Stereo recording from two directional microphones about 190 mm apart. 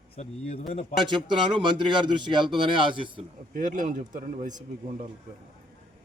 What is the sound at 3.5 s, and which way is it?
A man's voice, 40° right (ahead or behind).